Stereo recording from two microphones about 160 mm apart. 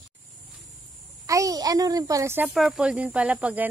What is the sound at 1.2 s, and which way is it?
A child's voice, 20° right (ahead or behind).